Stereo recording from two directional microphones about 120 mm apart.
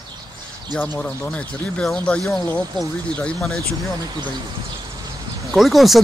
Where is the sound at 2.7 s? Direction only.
40° right (ahead or behind).